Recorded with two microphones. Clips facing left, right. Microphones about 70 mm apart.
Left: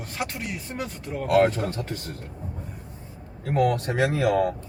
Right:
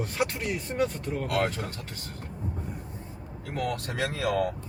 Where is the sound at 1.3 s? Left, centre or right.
Left.